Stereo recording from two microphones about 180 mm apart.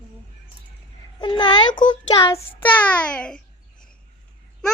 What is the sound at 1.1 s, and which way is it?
Child singing, 25° left (ahead or behind).